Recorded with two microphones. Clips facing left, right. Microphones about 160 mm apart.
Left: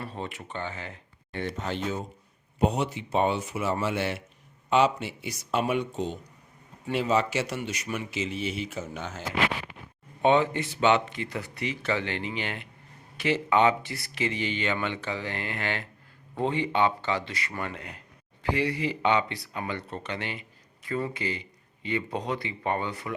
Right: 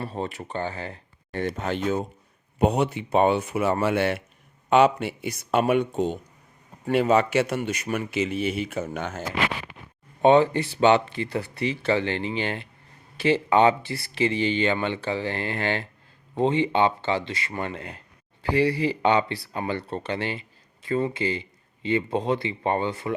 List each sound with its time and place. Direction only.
0.0 s speech: 35° right (ahead or behind); by 9.2 s 60° right (ahead or behind)
10.2 s speech: 35° right (ahead or behind)